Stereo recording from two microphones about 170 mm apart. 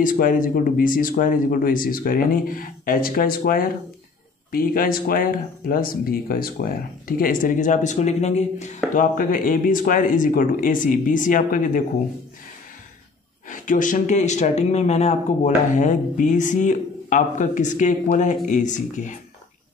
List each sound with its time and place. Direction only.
0.0 s speech: 55° left (ahead or behind)
13.5 s speech: 50° left (ahead or behind)